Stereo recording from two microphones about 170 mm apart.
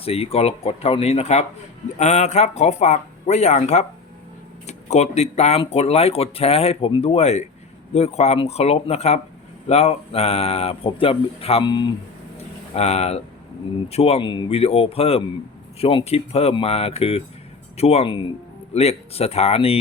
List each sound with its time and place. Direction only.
0.0 s speech: 35° left (ahead or behind)
12.7 s speech: 40° left (ahead or behind)